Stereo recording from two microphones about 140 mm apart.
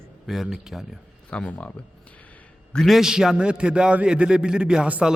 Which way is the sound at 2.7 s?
Centre (ahead or behind).